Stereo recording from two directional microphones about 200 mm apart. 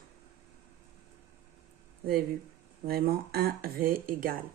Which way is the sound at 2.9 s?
50° right (ahead or behind).